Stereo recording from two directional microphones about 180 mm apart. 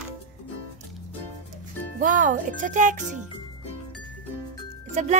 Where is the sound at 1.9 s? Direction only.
45° right (ahead or behind).